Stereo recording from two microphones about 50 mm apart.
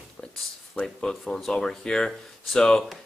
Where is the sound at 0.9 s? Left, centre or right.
Centre.